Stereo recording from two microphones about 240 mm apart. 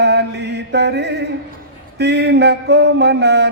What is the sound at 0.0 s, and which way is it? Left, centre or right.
Mantra, right.